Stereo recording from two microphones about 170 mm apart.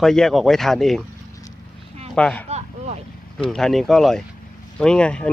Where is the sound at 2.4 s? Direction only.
40° right (ahead or behind).